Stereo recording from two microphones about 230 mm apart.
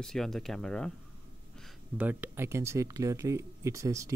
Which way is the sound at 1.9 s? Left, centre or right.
Centre.